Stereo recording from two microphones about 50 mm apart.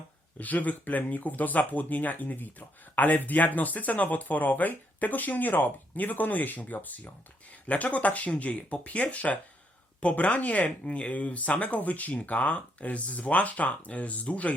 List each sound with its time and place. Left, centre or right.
0.3 s speech: left